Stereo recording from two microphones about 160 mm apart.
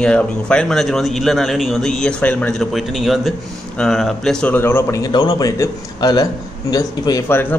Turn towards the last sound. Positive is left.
turn(degrees=20)  # may be behind; listen again after turning